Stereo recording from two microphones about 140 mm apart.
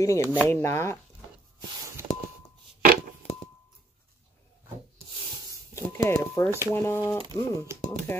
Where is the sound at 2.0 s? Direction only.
15° right (ahead or behind).